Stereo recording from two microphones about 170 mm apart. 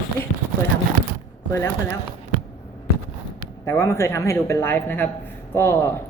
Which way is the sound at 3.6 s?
15° left (ahead or behind).